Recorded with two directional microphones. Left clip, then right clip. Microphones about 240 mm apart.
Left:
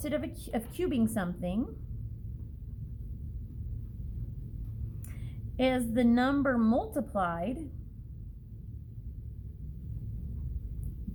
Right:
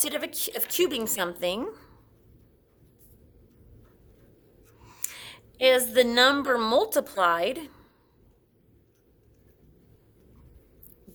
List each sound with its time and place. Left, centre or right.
0.0 s a woman's voice: right
5.0 s a woman's voice: right